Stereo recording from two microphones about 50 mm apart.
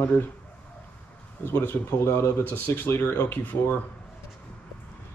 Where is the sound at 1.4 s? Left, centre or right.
Left.